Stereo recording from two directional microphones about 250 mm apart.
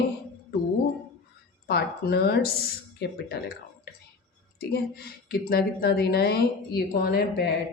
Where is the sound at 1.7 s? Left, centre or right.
Left.